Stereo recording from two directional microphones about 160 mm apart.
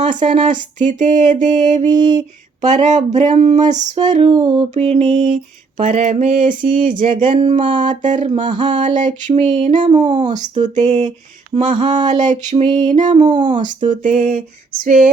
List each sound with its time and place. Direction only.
0.0 s mantra: 50° right (ahead or behind)
1.9 s music: 25° right (ahead or behind)
2.1 s a sound: 50° right (ahead or behind)
3.2 s mantra: 45° right (ahead or behind)
6.8 s a sound: 55° right (ahead or behind)
7.3 s mantra: 50° right (ahead or behind)
12.6 s music: 25° right (ahead or behind)
12.9 s mantra: 50° right (ahead or behind)
13.6 s a sound: 55° right (ahead or behind)